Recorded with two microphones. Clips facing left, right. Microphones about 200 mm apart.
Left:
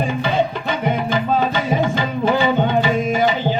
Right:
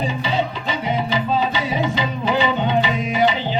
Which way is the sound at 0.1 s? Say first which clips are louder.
Left 3 dB; 55° left (ahead or behind).